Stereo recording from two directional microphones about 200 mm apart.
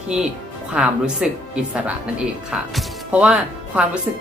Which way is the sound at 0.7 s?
5° right (ahead or behind).